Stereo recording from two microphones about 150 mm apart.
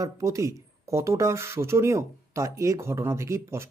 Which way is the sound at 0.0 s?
20° right (ahead or behind).